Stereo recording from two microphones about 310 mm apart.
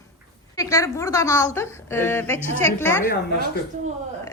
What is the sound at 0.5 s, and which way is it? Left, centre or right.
A woman's voice, centre.